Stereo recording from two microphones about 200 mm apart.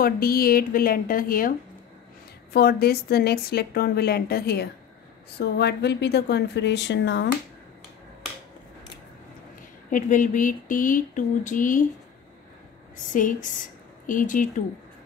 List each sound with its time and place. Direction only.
0.0 s a woman's voice: 45° left (ahead or behind)
2.5 s a woman's voice: 50° left (ahead or behind)
9.8 s a sound: 40° left (ahead or behind)
12.9 s speech: 40° left (ahead or behind)